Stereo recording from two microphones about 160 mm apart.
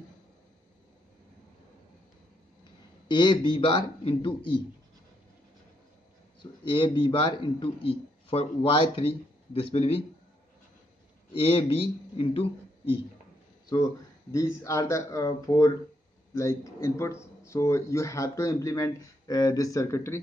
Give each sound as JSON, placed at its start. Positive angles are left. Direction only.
{"t": 3.1, "sound": "a man's voice", "side_deg": 30}
{"t": 6.4, "sound": "a man's voice", "side_deg": 30}
{"t": 11.3, "sound": "speech", "side_deg": 35}
{"t": 14.3, "sound": "speech", "side_deg": 20}